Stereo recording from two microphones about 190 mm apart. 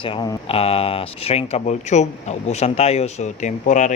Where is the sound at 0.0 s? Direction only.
30° left (ahead or behind).